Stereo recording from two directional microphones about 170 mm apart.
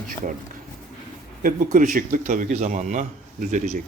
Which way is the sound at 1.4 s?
55° right (ahead or behind).